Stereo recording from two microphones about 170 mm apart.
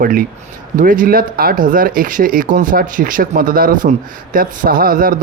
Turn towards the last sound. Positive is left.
turn(degrees=-55)  # may be behind; listen again after turning